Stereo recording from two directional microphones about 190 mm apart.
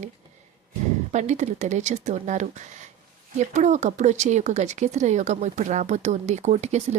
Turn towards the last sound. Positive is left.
turn(degrees=-35)  # may be behind; listen again after turning